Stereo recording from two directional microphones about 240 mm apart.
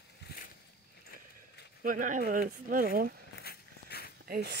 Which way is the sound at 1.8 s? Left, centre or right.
Right.